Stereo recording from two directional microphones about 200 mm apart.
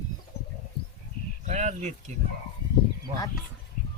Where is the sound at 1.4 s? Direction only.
35° right (ahead or behind).